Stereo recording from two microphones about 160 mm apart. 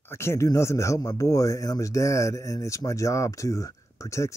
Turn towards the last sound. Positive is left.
turn(degrees=20)  # may be behind; listen again after turning